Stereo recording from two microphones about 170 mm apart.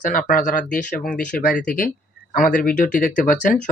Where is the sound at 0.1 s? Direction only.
55° left (ahead or behind).